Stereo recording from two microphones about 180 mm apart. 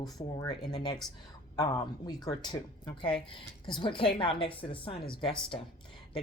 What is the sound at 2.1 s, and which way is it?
Speech, 20° left (ahead or behind).